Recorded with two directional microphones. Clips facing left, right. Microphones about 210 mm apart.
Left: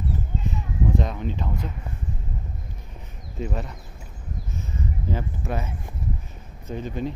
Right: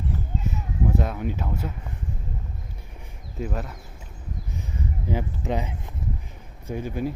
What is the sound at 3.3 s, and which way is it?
Speech, centre (ahead or behind).